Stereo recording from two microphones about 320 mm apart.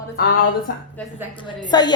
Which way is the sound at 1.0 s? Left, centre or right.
Centre.